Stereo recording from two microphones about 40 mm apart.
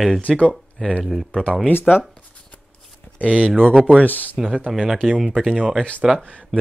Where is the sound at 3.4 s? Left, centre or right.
Centre.